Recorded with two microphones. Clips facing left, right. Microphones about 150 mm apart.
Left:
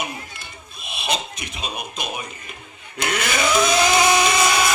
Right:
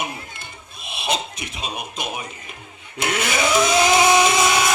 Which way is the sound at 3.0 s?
25° right (ahead or behind).